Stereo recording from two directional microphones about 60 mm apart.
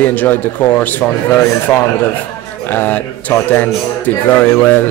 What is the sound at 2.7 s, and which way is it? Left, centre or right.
Speech, left.